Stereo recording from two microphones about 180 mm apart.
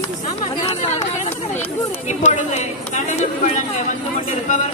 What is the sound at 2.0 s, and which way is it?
Speech, 40° left (ahead or behind).